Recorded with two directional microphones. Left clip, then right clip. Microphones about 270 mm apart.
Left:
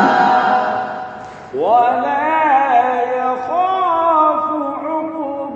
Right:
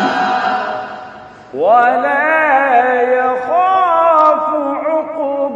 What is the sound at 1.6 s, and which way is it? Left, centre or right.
Mantra, right.